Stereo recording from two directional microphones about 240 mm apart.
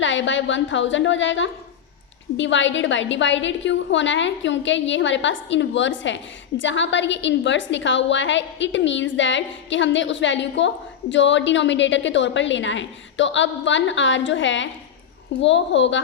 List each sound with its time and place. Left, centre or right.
0.0 s a woman's voice: left